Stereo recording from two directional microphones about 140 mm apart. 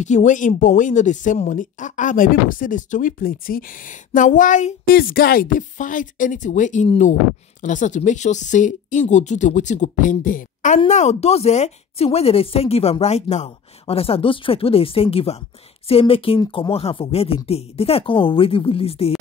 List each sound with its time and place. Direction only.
0.0 s speech: 60° left (ahead or behind)
10.9 s a woman's voice: 55° left (ahead or behind)